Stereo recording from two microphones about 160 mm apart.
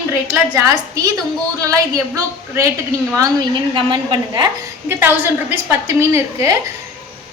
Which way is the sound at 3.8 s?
30° right (ahead or behind).